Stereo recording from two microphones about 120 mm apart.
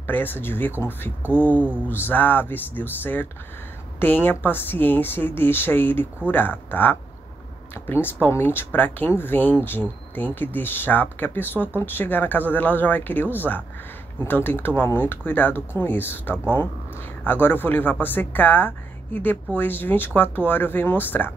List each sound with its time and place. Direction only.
0.0 s speech: 15° left (ahead or behind)